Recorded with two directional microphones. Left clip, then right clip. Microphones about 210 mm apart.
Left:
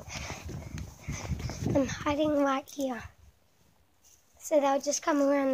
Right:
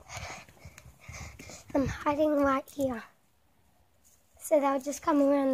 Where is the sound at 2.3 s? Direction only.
15° right (ahead or behind).